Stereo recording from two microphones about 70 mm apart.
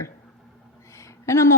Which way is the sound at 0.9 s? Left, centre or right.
Left.